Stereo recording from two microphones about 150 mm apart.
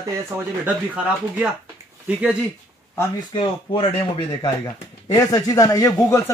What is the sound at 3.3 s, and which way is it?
Speech, 35° left (ahead or behind).